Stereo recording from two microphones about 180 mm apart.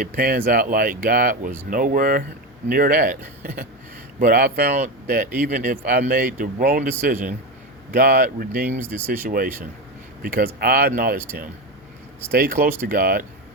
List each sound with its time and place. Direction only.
0.0 s speech: 50° right (ahead or behind)
4.2 s speech: 50° right (ahead or behind)
8.8 s speech: 15° right (ahead or behind)
10.2 s speech: 55° right (ahead or behind)
12.3 s speech: 55° right (ahead or behind)